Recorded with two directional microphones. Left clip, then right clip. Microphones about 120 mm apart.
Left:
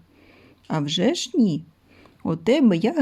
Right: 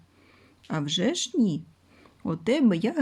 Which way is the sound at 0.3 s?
25° left (ahead or behind).